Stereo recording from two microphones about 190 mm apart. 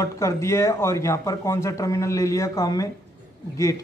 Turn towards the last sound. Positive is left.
turn(degrees=15)  # may be behind; listen again after turning